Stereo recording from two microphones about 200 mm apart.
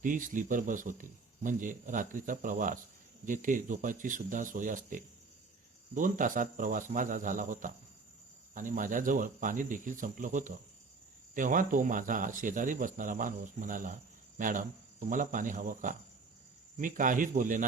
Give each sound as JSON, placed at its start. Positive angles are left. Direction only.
{"t": 0.0, "sound": "speech", "side_deg": -40}